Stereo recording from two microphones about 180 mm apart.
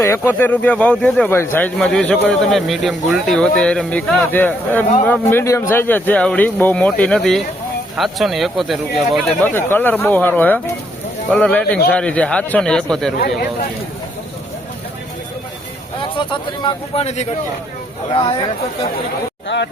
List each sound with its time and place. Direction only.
0.0 s a man's voice: 10° left (ahead or behind)
13.1 s speech: 60° left (ahead or behind)
16.9 s speech: 35° left (ahead or behind)
19.5 s speech: 90° left